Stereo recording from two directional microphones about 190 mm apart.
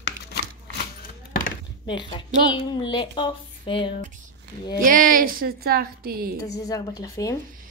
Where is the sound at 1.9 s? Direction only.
25° left (ahead or behind).